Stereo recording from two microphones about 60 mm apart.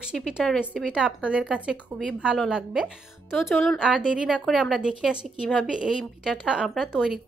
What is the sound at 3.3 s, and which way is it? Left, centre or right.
Speech, centre.